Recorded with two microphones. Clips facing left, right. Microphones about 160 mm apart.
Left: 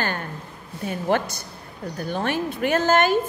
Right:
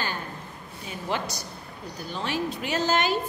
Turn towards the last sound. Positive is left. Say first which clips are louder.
# left 6 dB
turn(degrees=50)  # may be behind; listen again after turning